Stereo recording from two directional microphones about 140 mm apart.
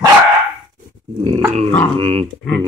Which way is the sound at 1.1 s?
40° right (ahead or behind).